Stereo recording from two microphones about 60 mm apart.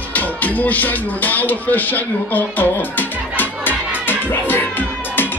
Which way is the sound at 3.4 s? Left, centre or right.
Left.